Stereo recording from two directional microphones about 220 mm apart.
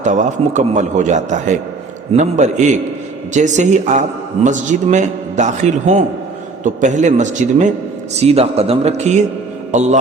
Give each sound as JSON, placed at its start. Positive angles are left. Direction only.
{"t": 0.0, "sound": "a man's voice", "side_deg": -35}